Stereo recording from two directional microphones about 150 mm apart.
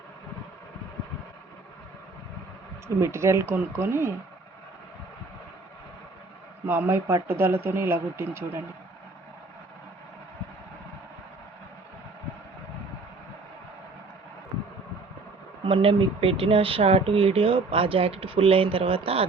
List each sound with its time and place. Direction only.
2.8 s speech: 20° right (ahead or behind)
6.7 s speech: 15° right (ahead or behind)
15.6 s speech: 40° right (ahead or behind)